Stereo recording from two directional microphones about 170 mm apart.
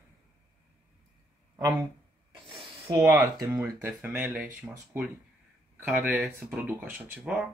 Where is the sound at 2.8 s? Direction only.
15° right (ahead or behind).